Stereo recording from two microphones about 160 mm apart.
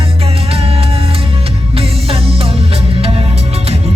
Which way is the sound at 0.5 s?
35° right (ahead or behind).